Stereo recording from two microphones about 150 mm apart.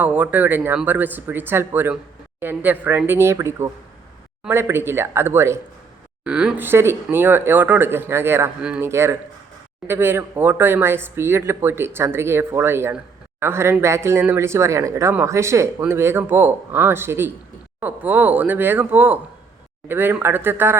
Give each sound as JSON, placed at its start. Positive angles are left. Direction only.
{"t": 0.0, "sound": "speech", "side_deg": -10}
{"t": 6.2, "sound": "speech", "side_deg": -5}